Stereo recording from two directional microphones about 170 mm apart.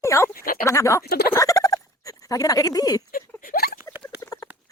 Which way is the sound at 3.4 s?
60° left (ahead or behind).